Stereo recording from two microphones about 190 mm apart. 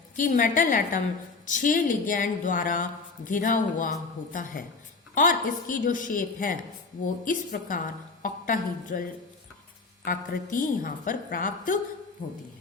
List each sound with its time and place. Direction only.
0.2 s a woman's voice: 45° left (ahead or behind)